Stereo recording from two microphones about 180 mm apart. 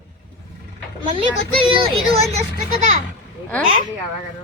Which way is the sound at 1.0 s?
30° right (ahead or behind).